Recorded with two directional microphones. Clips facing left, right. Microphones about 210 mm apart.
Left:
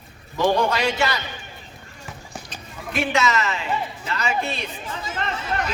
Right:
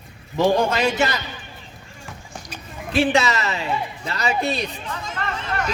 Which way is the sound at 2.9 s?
30° right (ahead or behind).